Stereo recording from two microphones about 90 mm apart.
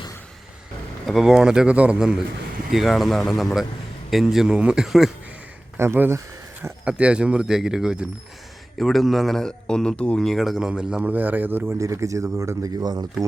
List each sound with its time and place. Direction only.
1.0 s a man's voice: 5° right (ahead or behind)
5.7 s speech: 25° right (ahead or behind)
6.8 s a man's voice: 10° right (ahead or behind)
11.8 s speech: 35° right (ahead or behind)